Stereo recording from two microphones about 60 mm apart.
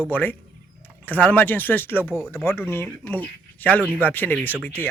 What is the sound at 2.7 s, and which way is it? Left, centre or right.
Speech, left.